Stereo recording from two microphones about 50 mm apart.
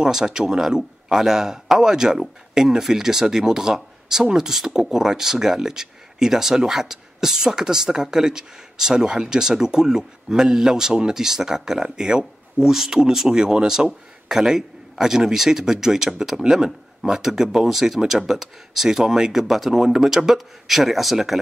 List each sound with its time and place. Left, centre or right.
0.0 s a man's voice: centre